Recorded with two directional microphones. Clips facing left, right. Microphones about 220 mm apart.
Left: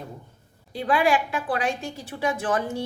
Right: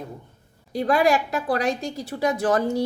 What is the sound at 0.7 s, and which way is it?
A woman's voice, 40° right (ahead or behind).